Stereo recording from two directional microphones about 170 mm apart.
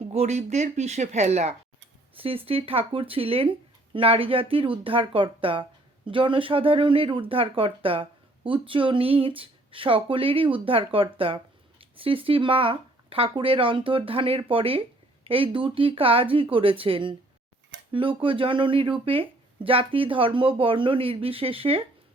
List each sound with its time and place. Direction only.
0.1 s speech: 40° right (ahead or behind)